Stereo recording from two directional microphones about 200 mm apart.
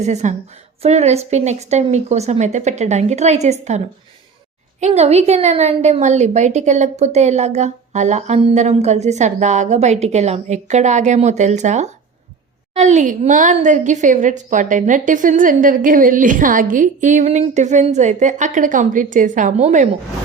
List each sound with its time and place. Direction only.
0.0 s a woman's voice: 35° right (ahead or behind)